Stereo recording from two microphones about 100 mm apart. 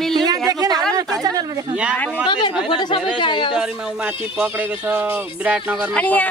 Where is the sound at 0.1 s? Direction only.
45° right (ahead or behind).